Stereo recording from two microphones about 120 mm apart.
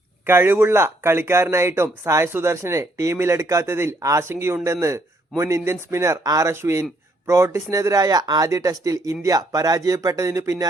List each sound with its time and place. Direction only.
0.3 s speech: 20° right (ahead or behind)